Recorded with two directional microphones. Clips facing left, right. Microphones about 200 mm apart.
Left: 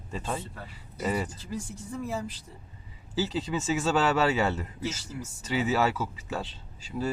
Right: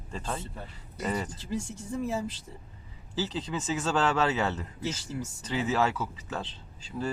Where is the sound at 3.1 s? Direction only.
10° left (ahead or behind).